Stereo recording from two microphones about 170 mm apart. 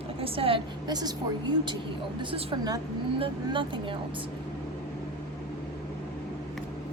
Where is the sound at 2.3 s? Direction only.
25° right (ahead or behind).